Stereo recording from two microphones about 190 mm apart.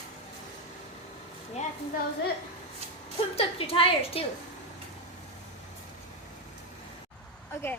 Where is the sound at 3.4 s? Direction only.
30° left (ahead or behind).